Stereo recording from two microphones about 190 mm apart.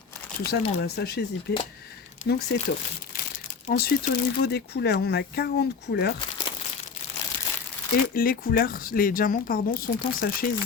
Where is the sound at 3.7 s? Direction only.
55° left (ahead or behind).